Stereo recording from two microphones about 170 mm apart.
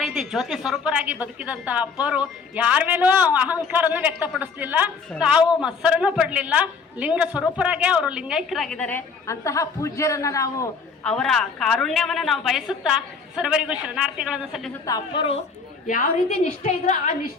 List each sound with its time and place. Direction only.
0.0 s a woman's voice: 5° right (ahead or behind); by 10.5 s 20° left (ahead or behind)
11.0 s a woman's voice: 5° left (ahead or behind)
14.8 s a woman's voice: 25° left (ahead or behind)
16.6 s a woman's voice: 45° left (ahead or behind)